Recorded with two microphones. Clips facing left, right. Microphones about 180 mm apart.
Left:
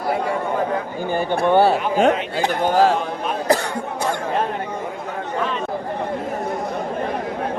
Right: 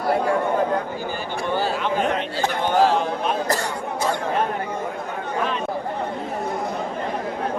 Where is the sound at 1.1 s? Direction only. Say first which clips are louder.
Left 11 dB; 60° left (ahead or behind).